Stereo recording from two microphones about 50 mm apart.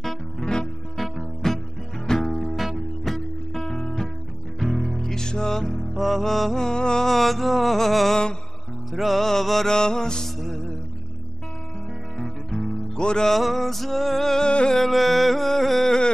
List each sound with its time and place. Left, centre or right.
0.0 s music: centre
2.5 s guitar: centre
3.0 s music: centre
12.9 s music: centre
13.3 s music: centre
14.5 s music: centre
14.8 s music: centre